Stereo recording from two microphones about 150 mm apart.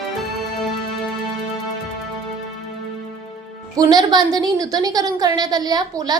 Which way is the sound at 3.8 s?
25° right (ahead or behind).